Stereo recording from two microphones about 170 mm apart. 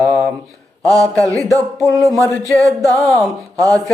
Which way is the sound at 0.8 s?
20° right (ahead or behind).